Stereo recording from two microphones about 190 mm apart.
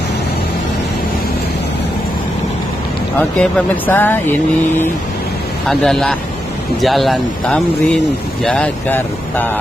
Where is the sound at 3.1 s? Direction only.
5° left (ahead or behind).